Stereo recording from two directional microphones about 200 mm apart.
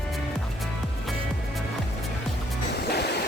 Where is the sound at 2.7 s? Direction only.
55° left (ahead or behind).